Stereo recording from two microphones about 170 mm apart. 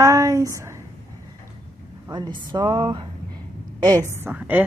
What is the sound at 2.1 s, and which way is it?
Speech, 25° right (ahead or behind).